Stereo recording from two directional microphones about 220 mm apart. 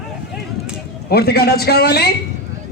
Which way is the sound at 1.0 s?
45° left (ahead or behind).